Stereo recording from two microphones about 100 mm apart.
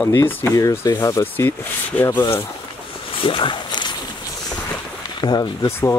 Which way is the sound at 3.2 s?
60° left (ahead or behind).